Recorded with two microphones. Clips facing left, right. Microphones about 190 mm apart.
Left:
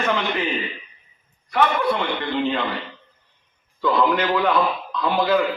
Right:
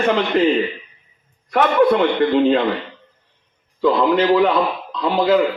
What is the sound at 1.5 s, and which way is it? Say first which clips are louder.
A man's voice: right 6 dB; 50° right (ahead or behind).